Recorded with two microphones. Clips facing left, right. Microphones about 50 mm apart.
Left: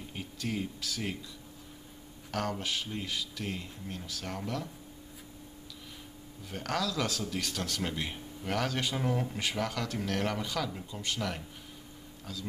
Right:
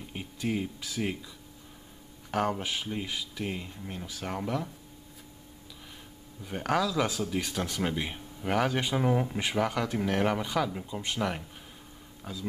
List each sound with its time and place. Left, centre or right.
0.1 s speech: centre
2.3 s speech: centre
6.4 s speech: centre